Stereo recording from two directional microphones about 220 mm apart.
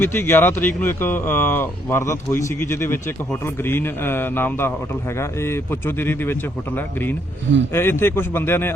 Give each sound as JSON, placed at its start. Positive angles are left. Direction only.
{"t": 0.0, "sound": "speech", "side_deg": 10}